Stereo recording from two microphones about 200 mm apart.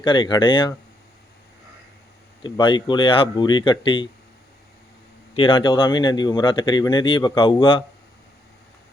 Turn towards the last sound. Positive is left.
turn(degrees=25)  # may be behind; listen again after turning